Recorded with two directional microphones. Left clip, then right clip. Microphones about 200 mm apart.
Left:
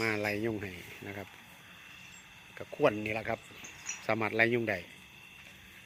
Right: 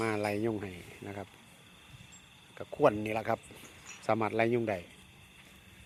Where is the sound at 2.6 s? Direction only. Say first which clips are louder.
Right 2 dB; 5° right (ahead or behind).